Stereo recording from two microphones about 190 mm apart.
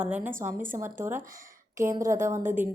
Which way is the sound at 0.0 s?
10° right (ahead or behind).